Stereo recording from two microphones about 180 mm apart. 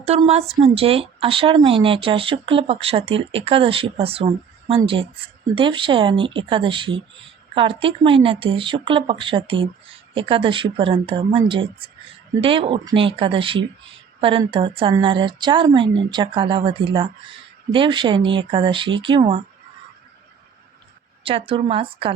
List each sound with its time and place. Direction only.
0.0 s speech: 35° right (ahead or behind)
21.2 s speech: 30° right (ahead or behind)